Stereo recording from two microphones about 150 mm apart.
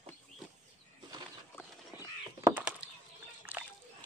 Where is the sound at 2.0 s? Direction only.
20° right (ahead or behind).